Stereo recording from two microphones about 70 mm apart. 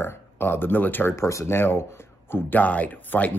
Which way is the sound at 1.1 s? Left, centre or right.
Left.